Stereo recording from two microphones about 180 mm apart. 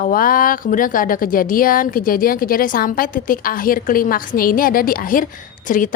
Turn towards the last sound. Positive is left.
turn(degrees=50)  # may be behind; listen again after turning